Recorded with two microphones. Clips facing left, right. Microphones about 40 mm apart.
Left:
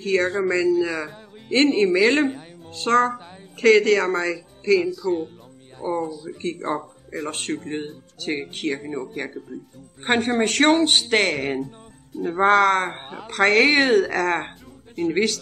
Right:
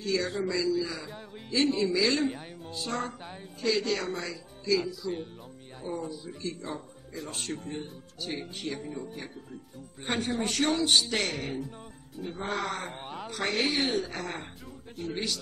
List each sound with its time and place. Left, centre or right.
0.0 s speech: left
2.7 s speech: left
5.0 s speech: centre
5.8 s speech: left
8.8 s speech: left
9.1 s a woman's voice: left
10.0 s speech: left
12.2 s a woman's voice: left
15.0 s speech: left